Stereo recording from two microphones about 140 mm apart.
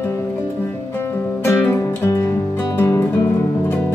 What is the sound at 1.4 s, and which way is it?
Music, 15° left (ahead or behind).